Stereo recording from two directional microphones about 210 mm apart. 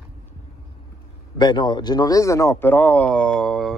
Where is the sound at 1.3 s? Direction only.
20° left (ahead or behind).